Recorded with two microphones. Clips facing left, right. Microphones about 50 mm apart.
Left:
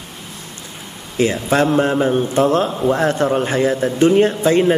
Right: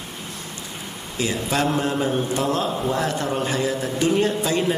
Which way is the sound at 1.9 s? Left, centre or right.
Left.